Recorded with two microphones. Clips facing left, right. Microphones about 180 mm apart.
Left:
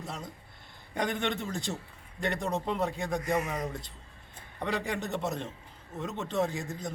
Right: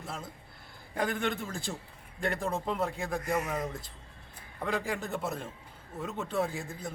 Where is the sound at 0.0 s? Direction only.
5° right (ahead or behind).